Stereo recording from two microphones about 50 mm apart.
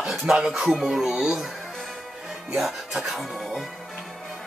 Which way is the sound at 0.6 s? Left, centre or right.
Centre.